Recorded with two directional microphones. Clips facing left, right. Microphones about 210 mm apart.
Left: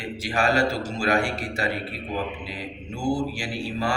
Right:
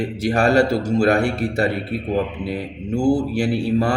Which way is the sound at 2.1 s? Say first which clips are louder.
Right 8 dB; 55° right (ahead or behind).